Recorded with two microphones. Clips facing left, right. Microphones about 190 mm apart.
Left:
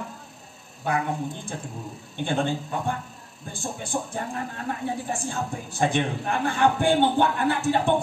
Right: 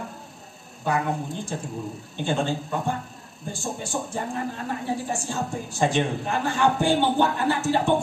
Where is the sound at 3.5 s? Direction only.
55° left (ahead or behind).